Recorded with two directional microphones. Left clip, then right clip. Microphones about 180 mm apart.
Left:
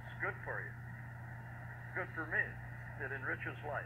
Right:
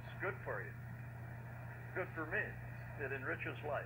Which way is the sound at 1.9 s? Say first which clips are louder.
Left 3 dB; 35° right (ahead or behind).